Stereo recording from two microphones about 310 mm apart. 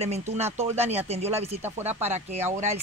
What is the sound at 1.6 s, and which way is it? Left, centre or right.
Speech, centre.